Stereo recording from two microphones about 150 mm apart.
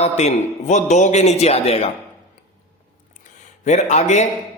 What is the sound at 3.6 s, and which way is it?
Speech, 50° left (ahead or behind).